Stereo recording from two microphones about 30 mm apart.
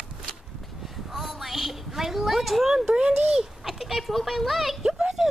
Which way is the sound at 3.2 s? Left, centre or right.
Centre.